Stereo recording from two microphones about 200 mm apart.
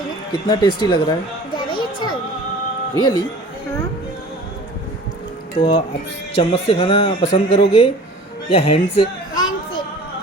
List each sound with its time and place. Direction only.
0.4 s speech: 20° left (ahead or behind)
1.5 s children playing: 20° left (ahead or behind)
2.9 s speech: 20° left (ahead or behind)
5.5 s speech: 25° left (ahead or behind)
8.4 s music: 30° left (ahead or behind)